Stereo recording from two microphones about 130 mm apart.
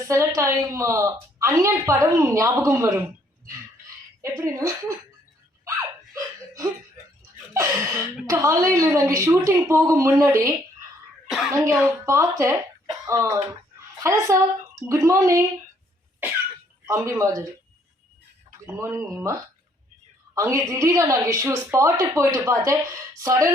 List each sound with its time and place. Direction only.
0.1 s a woman's voice: 20° right (ahead or behind)
3.4 s a sound: 20° right (ahead or behind)
5.6 s laughter: 25° right (ahead or behind)
7.5 s a sound: 20° right (ahead or behind)
8.3 s a woman's voice: 25° right (ahead or behind)
11.3 s speech: centre (ahead or behind)
11.5 s a woman's voice: 25° right (ahead or behind)
16.8 s a woman's voice: 25° right (ahead or behind)
18.6 s a woman's voice: 20° right (ahead or behind)